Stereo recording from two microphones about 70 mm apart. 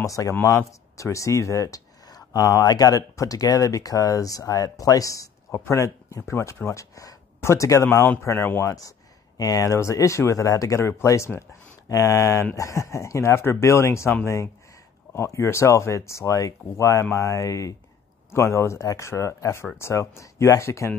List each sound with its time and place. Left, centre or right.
0.0 s speech: left
0.3 s speech: left
2.0 s a sound: left
2.6 s speech: left
7.8 s speech: left
8.6 s speech: left
11.9 s speech: left
18.3 s speech: left